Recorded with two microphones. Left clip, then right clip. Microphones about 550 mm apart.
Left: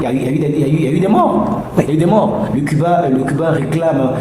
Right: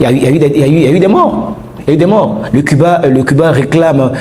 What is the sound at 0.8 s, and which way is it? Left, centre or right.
A man's voice, right.